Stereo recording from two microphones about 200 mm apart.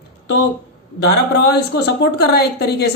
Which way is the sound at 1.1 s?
55° left (ahead or behind).